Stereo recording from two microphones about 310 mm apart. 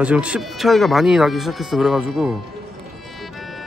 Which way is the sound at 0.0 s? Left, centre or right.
Centre.